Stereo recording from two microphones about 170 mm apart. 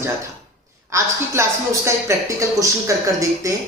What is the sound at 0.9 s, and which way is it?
A woman's voice, 15° right (ahead or behind).